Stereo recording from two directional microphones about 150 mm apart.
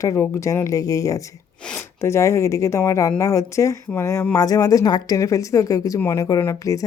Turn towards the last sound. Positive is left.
turn(degrees=20)  # may be behind; listen again after turning